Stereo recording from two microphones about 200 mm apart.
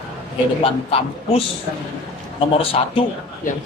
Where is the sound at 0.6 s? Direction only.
30° left (ahead or behind).